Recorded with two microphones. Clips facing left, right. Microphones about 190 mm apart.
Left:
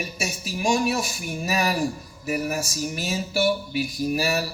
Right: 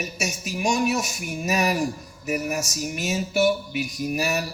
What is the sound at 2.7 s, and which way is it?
A man's voice, 35° left (ahead or behind).